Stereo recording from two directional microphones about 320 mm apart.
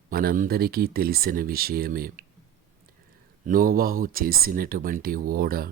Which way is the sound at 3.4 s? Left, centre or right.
Right.